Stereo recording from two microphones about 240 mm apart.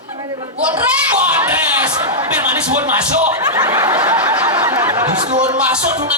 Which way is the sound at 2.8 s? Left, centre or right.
Centre.